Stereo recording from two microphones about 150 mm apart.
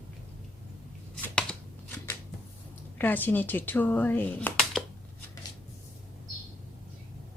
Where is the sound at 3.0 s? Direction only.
10° left (ahead or behind).